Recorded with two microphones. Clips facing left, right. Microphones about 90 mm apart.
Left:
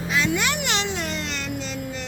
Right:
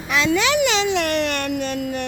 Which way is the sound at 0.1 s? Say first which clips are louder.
Right 6 dB; 90° right.